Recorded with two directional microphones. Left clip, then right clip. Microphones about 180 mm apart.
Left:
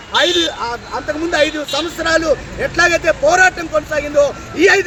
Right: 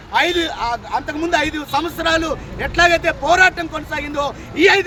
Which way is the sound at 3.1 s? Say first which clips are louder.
Left 2 dB; 25° right (ahead or behind).